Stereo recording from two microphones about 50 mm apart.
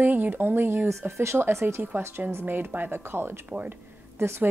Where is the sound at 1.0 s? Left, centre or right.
Right.